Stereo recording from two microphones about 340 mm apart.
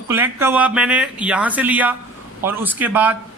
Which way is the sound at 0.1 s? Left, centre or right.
Centre.